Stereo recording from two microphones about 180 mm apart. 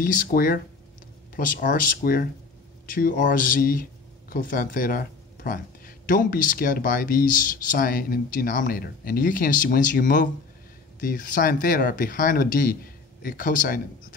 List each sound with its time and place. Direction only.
0.0 s speech: 50° left (ahead or behind)